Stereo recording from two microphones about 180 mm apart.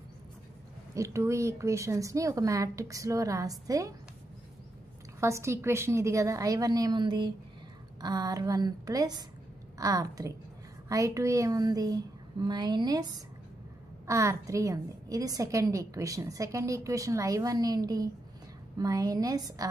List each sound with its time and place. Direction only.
0.9 s a woman's voice: 15° right (ahead or behind)
5.2 s a woman's voice: 15° right (ahead or behind)